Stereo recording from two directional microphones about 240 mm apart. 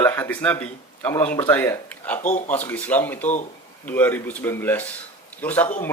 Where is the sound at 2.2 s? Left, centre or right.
Left.